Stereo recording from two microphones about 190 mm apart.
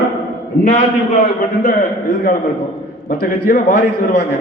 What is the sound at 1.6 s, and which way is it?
A man's voice, 45° left (ahead or behind).